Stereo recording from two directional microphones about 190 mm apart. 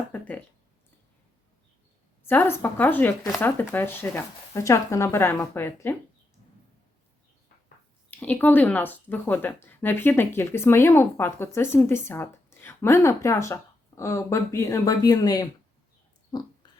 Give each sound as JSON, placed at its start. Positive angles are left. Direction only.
{"t": 2.2, "sound": "speech", "side_deg": 10}
{"t": 8.1, "sound": "speech", "side_deg": 10}